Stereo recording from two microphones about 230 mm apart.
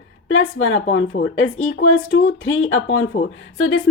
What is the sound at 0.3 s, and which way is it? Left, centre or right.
Speech, left.